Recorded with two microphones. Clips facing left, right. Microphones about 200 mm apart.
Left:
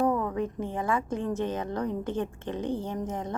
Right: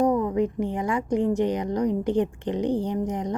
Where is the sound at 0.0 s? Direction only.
15° right (ahead or behind).